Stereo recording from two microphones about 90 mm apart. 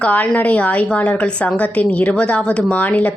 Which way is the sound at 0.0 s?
15° left (ahead or behind).